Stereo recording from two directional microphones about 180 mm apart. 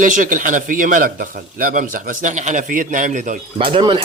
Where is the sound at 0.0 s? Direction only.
45° right (ahead or behind).